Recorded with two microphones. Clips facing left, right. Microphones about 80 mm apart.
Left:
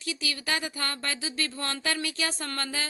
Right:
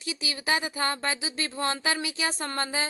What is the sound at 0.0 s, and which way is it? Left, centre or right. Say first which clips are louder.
Speech: right 1 dB; right.